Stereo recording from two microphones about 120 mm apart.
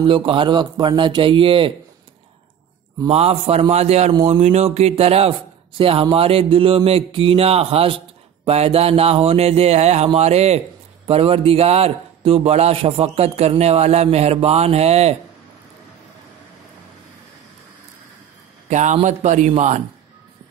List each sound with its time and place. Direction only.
0.0 s speech: 45° right (ahead or behind)
3.1 s a man's voice: 55° right (ahead or behind)
18.7 s a man's voice: 90° right
19.0 s speech: 80° right